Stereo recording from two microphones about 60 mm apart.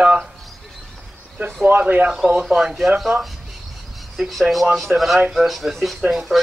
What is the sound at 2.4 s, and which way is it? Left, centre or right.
Speech, centre.